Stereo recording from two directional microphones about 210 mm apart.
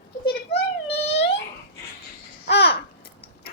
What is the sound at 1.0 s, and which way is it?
Babbling, 30° left (ahead or behind).